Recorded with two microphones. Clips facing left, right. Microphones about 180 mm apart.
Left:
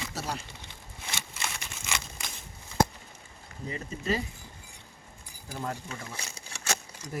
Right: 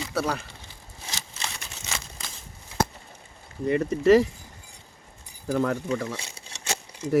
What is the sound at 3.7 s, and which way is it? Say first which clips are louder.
Speech: right 14 dB; 70° right (ahead or behind).